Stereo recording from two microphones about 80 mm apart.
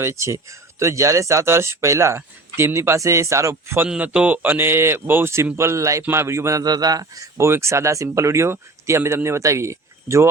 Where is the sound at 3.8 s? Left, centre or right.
Centre; by 6.6 s right.